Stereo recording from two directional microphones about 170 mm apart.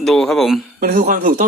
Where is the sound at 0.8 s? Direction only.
55° right (ahead or behind).